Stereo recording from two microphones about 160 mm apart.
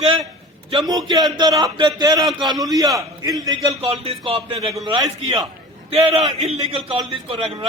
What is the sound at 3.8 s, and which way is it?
A man's voice, 35° right (ahead or behind).